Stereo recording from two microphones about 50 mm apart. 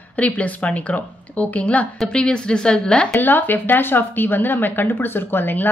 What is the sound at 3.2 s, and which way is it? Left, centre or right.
A woman's voice, left.